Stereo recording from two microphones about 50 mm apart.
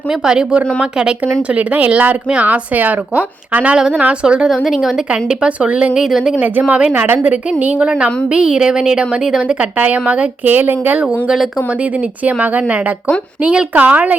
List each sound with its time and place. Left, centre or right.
0.1 s a woman's voice: centre
4.4 s speech: centre
5.1 s a woman's voice: centre
6.4 s a woman's voice: right
7.6 s a woman's voice: right
9.7 s a woman's voice: right
10.5 s a woman's voice: right
12.2 s a woman's voice: right